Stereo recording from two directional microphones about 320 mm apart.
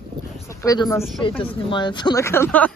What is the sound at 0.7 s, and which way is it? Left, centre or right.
Speech, centre.